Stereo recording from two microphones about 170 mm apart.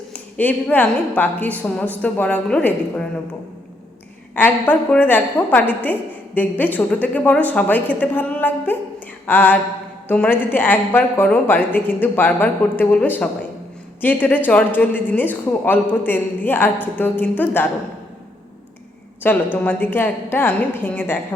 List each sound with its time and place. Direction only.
0.1 s a woman's voice: 10° left (ahead or behind)
4.4 s a woman's voice: 10° left (ahead or behind)
19.2 s a woman's voice: 10° left (ahead or behind)